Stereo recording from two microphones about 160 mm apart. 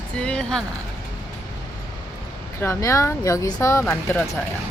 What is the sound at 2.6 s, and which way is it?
Speech, 20° left (ahead or behind).